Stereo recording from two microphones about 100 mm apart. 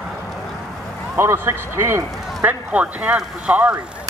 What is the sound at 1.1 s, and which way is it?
Speech, 25° right (ahead or behind).